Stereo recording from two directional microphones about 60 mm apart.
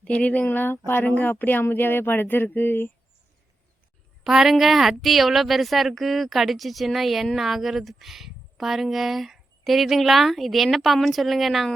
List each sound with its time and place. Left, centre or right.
0.0 s speech: centre; by 2.9 s left
4.2 s speech: centre